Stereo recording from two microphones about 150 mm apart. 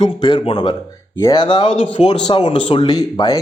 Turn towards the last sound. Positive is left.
turn(degrees=25)  # may be behind; listen again after turning